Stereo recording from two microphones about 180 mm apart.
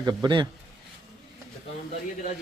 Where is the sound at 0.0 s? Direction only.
20° right (ahead or behind).